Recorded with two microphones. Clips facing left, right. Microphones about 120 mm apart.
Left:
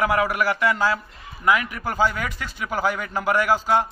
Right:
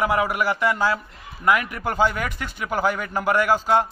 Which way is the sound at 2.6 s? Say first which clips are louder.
Right 1 dB; 5° left (ahead or behind).